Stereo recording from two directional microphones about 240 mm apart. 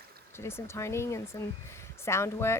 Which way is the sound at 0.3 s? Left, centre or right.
Centre.